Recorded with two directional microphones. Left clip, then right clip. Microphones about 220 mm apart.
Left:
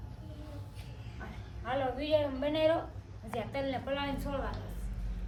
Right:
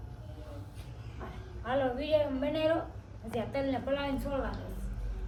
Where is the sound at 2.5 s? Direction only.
50° left (ahead or behind).